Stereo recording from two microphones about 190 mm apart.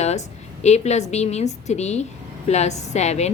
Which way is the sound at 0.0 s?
35° left (ahead or behind).